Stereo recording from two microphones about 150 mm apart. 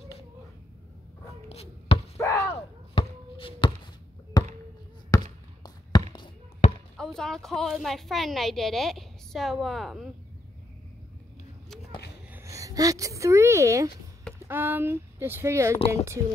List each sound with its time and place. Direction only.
1.5 s writing: 45° left (ahead or behind)
2.1 s chop: 20° left (ahead or behind)
2.9 s basketball bounce: 35° left (ahead or behind)
7.0 s a woman's voice: 5° left (ahead or behind)
12.3 s speech: 15° right (ahead or behind)